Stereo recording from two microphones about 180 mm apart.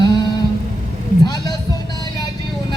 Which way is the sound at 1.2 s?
20° left (ahead or behind).